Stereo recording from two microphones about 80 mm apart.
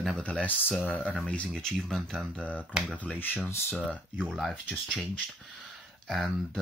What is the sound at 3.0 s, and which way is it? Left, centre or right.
Speech, left.